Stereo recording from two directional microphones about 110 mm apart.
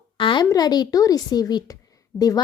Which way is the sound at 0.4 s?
35° left (ahead or behind).